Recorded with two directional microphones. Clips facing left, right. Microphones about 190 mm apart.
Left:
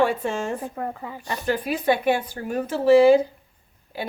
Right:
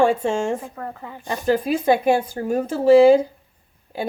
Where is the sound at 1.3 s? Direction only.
45° right (ahead or behind).